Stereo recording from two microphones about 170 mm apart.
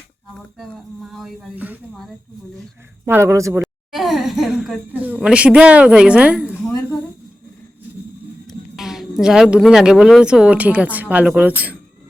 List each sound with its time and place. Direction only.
0.3 s speech: 5° left (ahead or behind)
1.9 s speech: centre (ahead or behind)
3.1 s speech: 15° right (ahead or behind)
3.6 s a sound: centre (ahead or behind)
8.4 s speech: centre (ahead or behind)